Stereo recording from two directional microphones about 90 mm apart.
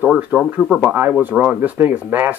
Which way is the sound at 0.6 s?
Centre (ahead or behind).